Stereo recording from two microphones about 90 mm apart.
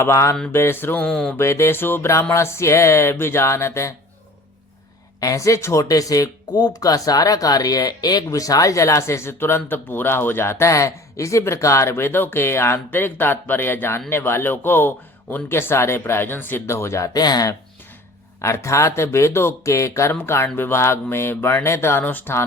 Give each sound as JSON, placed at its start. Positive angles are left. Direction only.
{"t": 0.0, "sound": "speech", "side_deg": 30}
{"t": 1.0, "sound": "a sound", "side_deg": 10}
{"t": 1.4, "sound": "speech", "side_deg": 30}
{"t": 5.2, "sound": "speech", "side_deg": 40}
{"t": 17.2, "sound": "speech", "side_deg": 45}
{"t": 18.4, "sound": "speech", "side_deg": 35}